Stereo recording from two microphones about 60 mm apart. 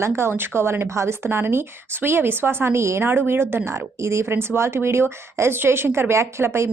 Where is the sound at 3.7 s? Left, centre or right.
Right.